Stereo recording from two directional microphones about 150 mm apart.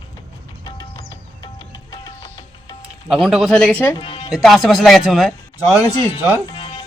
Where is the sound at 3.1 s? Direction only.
Centre (ahead or behind).